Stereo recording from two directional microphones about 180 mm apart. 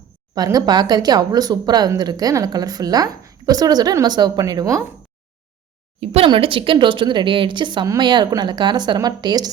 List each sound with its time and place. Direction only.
0.3 s speech: 20° right (ahead or behind)
6.0 s speech: 35° right (ahead or behind)